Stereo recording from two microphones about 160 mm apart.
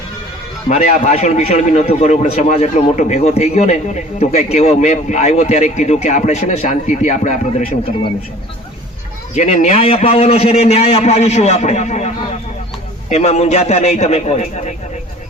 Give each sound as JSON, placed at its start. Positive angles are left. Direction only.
{"t": 0.7, "sound": "a man's voice", "side_deg": 45}
{"t": 9.3, "sound": "a man's voice", "side_deg": 45}